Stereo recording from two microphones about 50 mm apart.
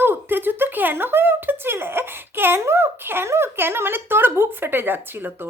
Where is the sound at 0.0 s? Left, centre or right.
Right.